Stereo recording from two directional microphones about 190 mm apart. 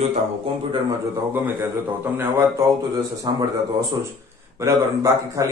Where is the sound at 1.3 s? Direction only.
10° right (ahead or behind).